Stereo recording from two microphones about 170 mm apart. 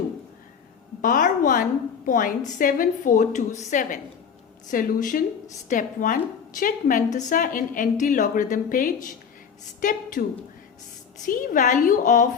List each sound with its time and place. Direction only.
1.0 s a woman's voice: 50° left (ahead or behind)
11.3 s a woman's voice: 50° left (ahead or behind)